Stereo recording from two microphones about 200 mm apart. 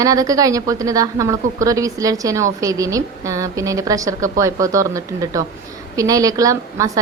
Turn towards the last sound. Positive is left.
turn(degrees=-15)  # may be behind; listen again after turning